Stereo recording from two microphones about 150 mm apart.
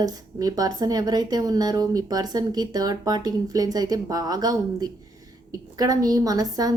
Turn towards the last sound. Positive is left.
turn(degrees=-25)  # may be behind; listen again after turning